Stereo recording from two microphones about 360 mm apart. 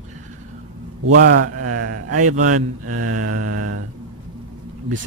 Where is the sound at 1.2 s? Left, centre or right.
Right.